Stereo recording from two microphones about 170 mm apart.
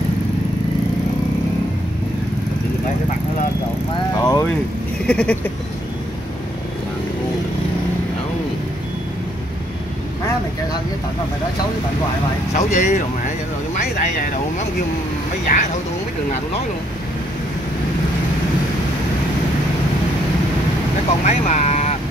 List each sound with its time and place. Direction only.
4.2 s vehicle: 20° left (ahead or behind)
5.0 s a sound: 5° left (ahead or behind)
12.5 s speech: 45° left (ahead or behind)
15.5 s speech: 55° left (ahead or behind)
21.3 s speech: 45° left (ahead or behind)